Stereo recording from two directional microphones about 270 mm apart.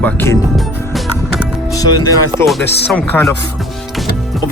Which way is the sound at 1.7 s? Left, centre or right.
Centre.